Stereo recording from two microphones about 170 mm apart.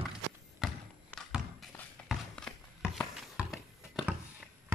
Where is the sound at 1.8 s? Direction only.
5° left (ahead or behind).